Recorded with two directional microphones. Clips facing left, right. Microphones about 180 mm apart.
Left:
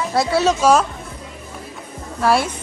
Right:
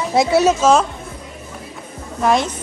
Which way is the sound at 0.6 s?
10° left (ahead or behind).